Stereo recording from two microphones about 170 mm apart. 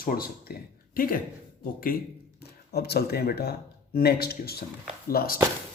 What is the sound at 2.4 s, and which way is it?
A man's voice, 70° left (ahead or behind).